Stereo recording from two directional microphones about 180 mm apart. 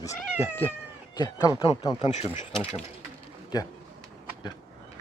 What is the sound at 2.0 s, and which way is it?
Speech, 40° left (ahead or behind).